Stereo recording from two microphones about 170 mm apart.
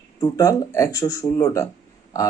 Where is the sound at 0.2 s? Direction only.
20° left (ahead or behind).